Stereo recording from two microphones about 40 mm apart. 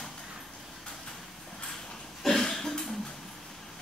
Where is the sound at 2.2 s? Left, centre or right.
Centre.